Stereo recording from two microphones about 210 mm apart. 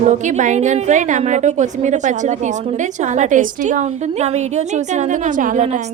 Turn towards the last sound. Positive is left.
turn(degrees=-35)  # may be behind; listen again after turning